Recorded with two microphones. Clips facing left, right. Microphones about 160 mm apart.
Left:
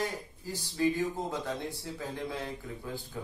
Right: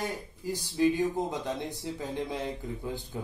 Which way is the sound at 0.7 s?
15° right (ahead or behind).